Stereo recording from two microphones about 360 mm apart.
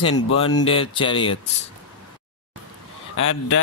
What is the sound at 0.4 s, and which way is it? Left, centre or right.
A man's voice, centre.